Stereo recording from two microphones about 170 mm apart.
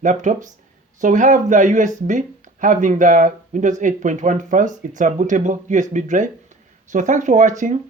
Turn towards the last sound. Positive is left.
turn(degrees=-45)  # may be behind; listen again after turning